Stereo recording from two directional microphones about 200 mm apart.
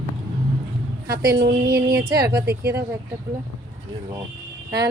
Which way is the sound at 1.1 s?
50° right (ahead or behind).